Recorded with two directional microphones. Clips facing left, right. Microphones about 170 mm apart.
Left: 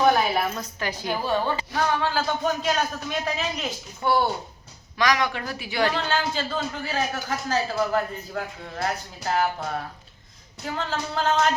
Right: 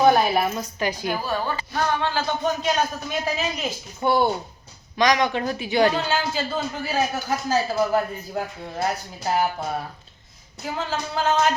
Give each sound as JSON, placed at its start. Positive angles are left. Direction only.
{"t": 0.0, "sound": "a sound", "side_deg": -25}
{"t": 0.5, "sound": "speech", "side_deg": -15}
{"t": 1.2, "sound": "speech", "side_deg": 20}
{"t": 1.7, "sound": "speech", "side_deg": 5}
{"t": 4.0, "sound": "speech", "side_deg": -20}
{"t": 6.1, "sound": "speech", "side_deg": -10}